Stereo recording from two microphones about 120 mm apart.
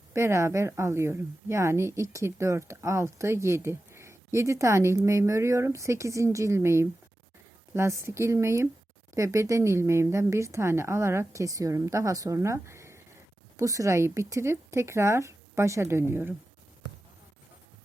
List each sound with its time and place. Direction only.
0.1 s a woman's voice: 25° right (ahead or behind)